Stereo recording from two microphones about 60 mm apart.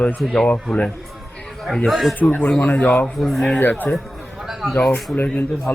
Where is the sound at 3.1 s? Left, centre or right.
Centre.